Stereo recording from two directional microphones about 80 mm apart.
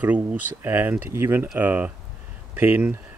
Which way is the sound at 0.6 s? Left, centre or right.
Right.